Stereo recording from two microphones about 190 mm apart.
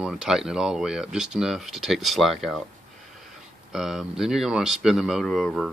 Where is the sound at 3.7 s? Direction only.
Centre (ahead or behind).